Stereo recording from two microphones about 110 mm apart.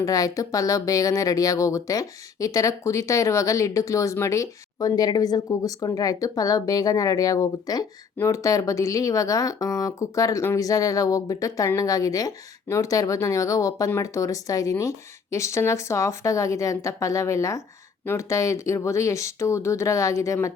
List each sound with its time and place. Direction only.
0.0 s speech: 30° left (ahead or behind)